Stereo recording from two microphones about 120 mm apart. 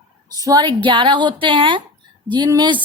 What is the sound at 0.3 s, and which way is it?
A woman's voice, 30° right (ahead or behind).